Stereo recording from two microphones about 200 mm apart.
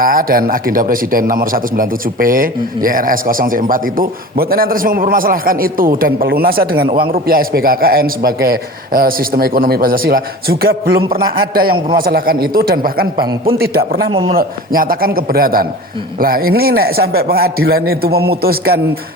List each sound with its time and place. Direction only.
0.0 s a man's voice: 45° right (ahead or behind)
14.1 s a man's voice: 25° right (ahead or behind)
14.3 s a man's voice: 45° right (ahead or behind)